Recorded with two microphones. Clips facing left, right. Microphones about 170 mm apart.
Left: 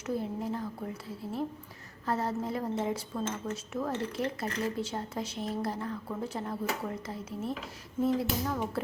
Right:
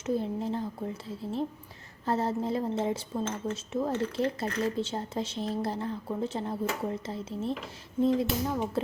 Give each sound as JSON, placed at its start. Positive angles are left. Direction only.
{"t": 0.0, "sound": "speech", "side_deg": -25}